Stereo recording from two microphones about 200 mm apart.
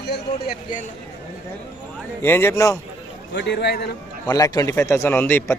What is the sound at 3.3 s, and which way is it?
Speech, 60° left (ahead or behind).